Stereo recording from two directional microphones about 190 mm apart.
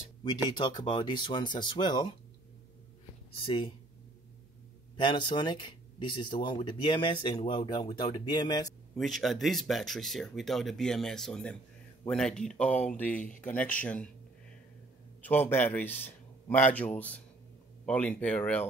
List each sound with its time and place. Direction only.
0.2 s speech: 20° left (ahead or behind)
3.4 s speech: 25° left (ahead or behind)
4.9 s speech: 25° left (ahead or behind)
8.9 s speech: centre (ahead or behind)
15.2 s a man's voice: 10° left (ahead or behind)